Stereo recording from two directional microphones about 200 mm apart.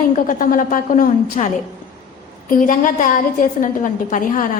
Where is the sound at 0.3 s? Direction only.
40° left (ahead or behind).